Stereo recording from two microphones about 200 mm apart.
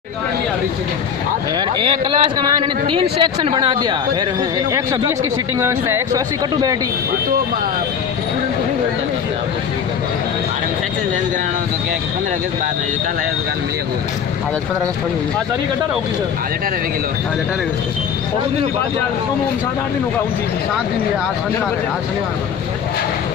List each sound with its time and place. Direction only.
1.8 s a man's voice: 25° right (ahead or behind)
5.6 s speech: 15° right (ahead or behind)